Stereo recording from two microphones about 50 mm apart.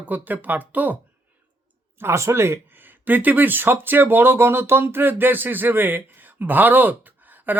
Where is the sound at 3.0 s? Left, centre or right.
Right.